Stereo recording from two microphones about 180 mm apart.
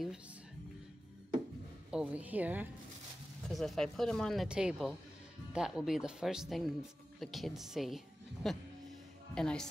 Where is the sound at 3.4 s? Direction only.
Centre (ahead or behind).